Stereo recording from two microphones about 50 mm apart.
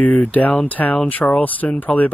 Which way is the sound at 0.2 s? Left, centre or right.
Left.